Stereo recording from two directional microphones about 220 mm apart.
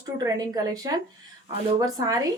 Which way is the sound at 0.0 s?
15° right (ahead or behind).